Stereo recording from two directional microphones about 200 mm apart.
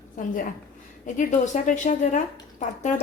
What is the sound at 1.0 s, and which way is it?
Speech, 40° left (ahead or behind).